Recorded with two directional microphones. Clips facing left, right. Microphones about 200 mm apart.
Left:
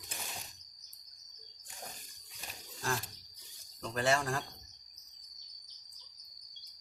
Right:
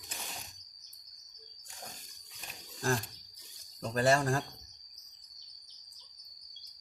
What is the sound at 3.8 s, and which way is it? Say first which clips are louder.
Speech: right 4 dB; 40° right (ahead or behind).